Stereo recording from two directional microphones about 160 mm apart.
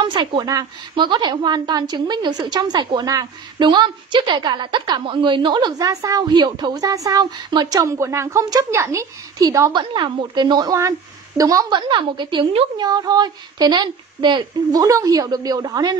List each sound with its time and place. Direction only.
0.0 s a woman's voice: 30° right (ahead or behind)